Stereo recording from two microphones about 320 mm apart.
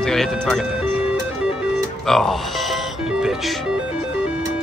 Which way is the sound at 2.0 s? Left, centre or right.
Centre.